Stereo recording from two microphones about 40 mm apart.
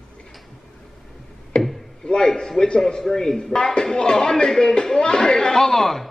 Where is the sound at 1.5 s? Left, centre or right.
Left.